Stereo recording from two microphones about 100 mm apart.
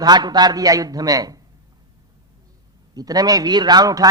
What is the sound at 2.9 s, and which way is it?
A man's voice, 40° right (ahead or behind).